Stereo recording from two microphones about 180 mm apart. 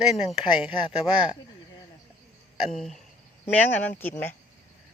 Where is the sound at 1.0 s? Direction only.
5° right (ahead or behind).